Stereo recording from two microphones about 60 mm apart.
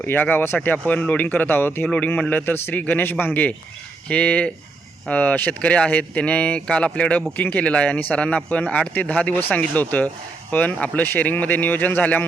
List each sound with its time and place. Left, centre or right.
0.0 s speech: left